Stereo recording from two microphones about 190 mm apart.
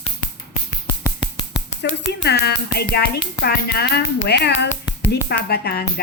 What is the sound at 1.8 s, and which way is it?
Speech, 60° left (ahead or behind).